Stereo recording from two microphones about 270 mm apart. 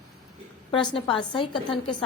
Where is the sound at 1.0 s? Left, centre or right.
Centre.